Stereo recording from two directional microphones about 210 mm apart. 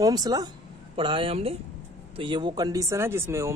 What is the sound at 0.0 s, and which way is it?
A man's voice, 20° right (ahead or behind).